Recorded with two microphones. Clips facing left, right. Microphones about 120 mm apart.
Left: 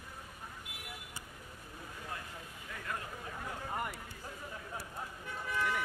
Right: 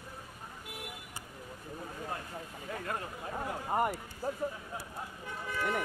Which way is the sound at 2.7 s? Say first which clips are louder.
Right 4 dB; 35° right (ahead or behind).